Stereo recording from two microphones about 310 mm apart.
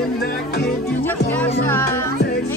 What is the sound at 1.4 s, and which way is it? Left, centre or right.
Music, centre.